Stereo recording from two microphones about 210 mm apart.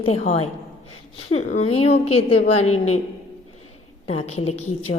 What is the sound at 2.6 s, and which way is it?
Speech, 90° left.